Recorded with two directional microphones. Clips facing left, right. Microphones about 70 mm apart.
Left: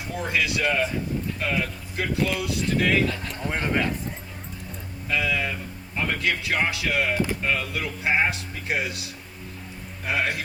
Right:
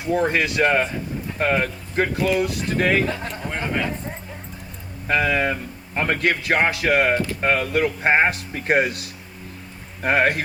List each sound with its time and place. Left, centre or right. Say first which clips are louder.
0.1 s a man's voice: right 6 dB; right
3.5 s speech: even; centre
5.0 s a man's voice: right 6 dB; right